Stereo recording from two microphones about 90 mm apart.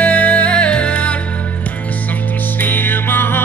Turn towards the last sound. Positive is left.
turn(degrees=25)  # may be behind; listen again after turning